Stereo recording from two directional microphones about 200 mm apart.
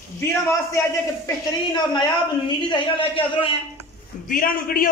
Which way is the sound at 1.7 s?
20° left (ahead or behind).